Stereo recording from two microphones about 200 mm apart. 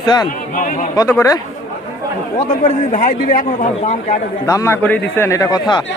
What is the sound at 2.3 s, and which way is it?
A man's voice, 30° left (ahead or behind).